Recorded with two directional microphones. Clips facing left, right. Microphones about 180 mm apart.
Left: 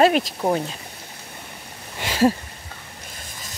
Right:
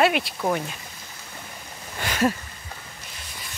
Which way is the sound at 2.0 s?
30° left (ahead or behind).